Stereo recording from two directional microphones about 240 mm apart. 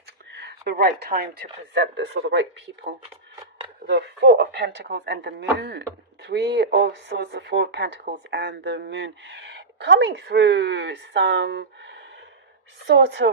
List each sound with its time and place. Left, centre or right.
0.3 s speech: right